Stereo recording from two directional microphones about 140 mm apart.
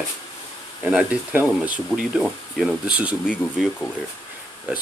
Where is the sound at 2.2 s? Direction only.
Centre (ahead or behind).